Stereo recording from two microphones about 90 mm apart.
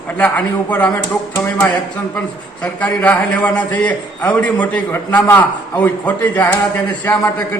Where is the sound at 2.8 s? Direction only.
15° left (ahead or behind).